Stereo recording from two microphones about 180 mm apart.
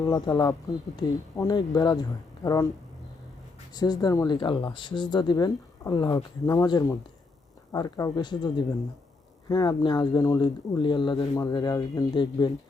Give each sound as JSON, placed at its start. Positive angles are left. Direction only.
{"t": 0.0, "sound": "speech", "side_deg": 20}
{"t": 3.8, "sound": "speech", "side_deg": 20}